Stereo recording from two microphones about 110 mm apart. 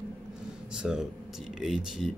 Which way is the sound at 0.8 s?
5° right (ahead or behind).